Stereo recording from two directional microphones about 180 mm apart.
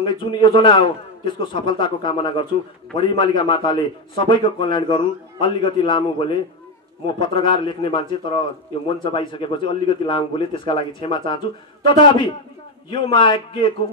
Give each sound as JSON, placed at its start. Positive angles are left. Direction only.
{"t": 0.0, "sound": "a man's voice", "side_deg": 25}